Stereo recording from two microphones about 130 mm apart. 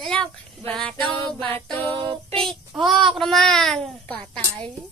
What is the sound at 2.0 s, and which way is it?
Child singing, 40° right (ahead or behind).